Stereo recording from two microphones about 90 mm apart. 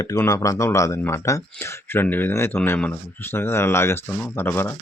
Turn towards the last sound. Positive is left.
turn(degrees=25)  # may be behind; listen again after turning